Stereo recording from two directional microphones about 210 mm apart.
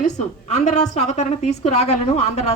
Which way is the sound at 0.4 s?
35° left (ahead or behind).